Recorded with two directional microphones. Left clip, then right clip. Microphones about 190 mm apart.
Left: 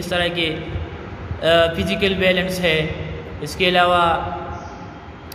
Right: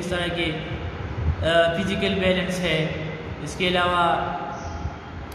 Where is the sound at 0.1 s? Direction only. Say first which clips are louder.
Left 6 dB; 45° left (ahead or behind).